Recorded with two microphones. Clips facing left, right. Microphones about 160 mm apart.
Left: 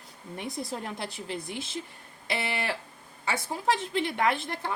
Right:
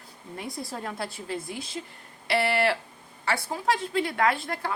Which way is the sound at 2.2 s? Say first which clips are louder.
Right 7 dB; 20° left (ahead or behind).